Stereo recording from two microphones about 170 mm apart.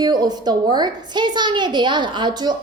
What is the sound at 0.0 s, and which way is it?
A woman's voice, 25° right (ahead or behind).